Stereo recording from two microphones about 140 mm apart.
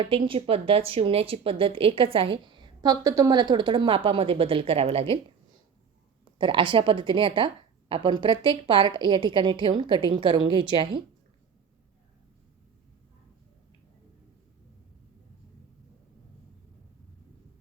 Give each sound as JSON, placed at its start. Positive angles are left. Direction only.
{"t": 0.0, "sound": "speech", "side_deg": -40}
{"t": 6.4, "sound": "speech", "side_deg": -35}